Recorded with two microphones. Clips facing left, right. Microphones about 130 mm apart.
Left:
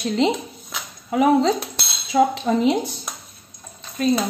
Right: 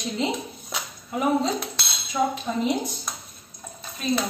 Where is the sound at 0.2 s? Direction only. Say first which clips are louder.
Left 7 dB; 75° left (ahead or behind).